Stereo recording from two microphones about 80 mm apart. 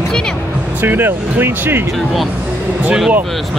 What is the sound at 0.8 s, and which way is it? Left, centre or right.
Speech, right.